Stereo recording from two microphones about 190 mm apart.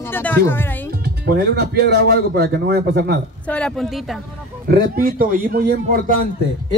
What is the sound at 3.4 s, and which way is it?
Speech, 5° left (ahead or behind).